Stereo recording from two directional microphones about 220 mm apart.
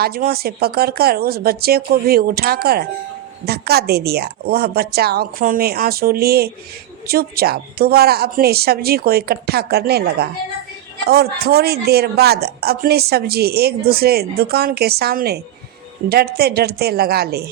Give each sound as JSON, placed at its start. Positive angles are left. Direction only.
{"t": 0.0, "sound": "speech", "side_deg": -45}